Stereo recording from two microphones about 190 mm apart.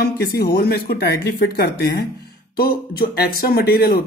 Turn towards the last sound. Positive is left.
turn(degrees=55)  # may be behind; listen again after turning